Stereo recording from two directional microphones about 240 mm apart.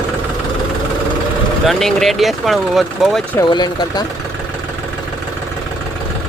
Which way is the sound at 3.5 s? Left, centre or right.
Centre.